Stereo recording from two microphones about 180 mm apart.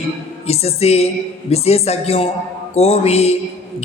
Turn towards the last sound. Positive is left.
turn(degrees=35)  # may be behind; listen again after turning